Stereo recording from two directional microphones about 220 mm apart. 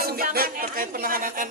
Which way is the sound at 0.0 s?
40° right (ahead or behind).